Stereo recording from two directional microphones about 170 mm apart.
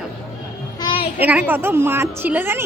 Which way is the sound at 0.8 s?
25° left (ahead or behind).